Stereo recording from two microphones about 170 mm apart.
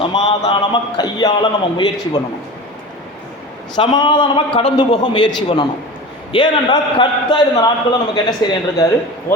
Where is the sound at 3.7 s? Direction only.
25° left (ahead or behind).